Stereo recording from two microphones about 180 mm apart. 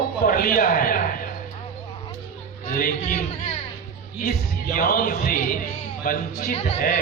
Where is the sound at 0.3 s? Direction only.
50° left (ahead or behind).